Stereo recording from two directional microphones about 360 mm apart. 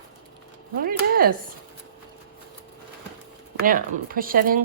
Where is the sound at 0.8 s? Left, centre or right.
Right.